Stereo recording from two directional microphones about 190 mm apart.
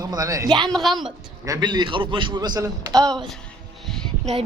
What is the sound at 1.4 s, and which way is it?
A man's voice, 20° right (ahead or behind).